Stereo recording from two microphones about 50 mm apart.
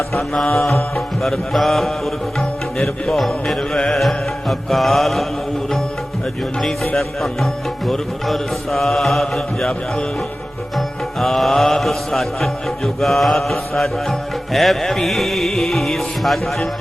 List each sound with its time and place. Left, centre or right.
0.2 s music: centre
0.7 s music: left
1.2 s music: centre
6.9 s music: centre